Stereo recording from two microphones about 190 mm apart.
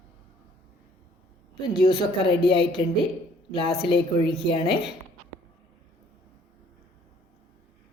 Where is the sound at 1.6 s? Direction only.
25° left (ahead or behind).